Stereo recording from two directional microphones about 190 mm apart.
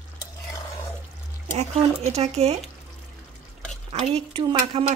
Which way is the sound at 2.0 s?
35° right (ahead or behind).